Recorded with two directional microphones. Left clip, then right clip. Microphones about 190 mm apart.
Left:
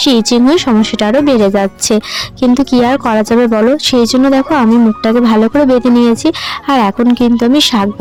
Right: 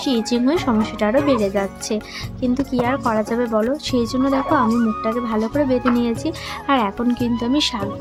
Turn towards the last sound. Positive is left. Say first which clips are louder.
# left 10 dB
turn(degrees=40)  # may be behind; listen again after turning